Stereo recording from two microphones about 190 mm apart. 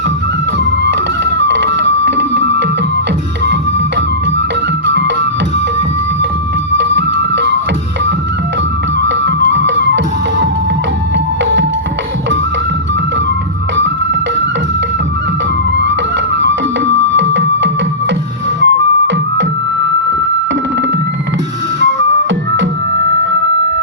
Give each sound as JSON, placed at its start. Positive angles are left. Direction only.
{"t": 0.6, "sound": "music", "side_deg": -70}
{"t": 4.9, "sound": "music", "side_deg": -70}
{"t": 6.7, "sound": "music", "side_deg": -70}
{"t": 9.0, "sound": "music", "side_deg": -70}
{"t": 13.7, "sound": "music", "side_deg": -70}
{"t": 15.8, "sound": "music", "side_deg": -70}
{"t": 21.8, "sound": "flute", "side_deg": -75}